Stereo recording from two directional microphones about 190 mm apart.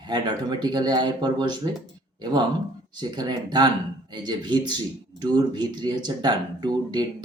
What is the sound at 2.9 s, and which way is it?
Speech, 20° right (ahead or behind).